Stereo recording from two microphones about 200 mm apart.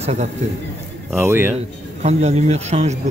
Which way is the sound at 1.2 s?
10° right (ahead or behind).